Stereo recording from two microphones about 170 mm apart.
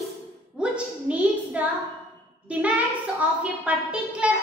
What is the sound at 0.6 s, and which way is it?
A woman's voice, 5° right (ahead or behind).